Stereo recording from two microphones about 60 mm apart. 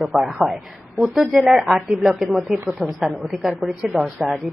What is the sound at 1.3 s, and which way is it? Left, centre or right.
Speech, centre.